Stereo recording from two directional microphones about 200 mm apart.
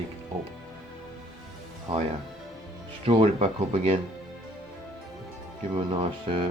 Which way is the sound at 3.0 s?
30° right (ahead or behind).